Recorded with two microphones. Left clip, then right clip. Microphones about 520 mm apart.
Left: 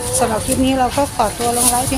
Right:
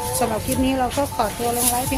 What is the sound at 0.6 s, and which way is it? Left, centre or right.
Speech, right.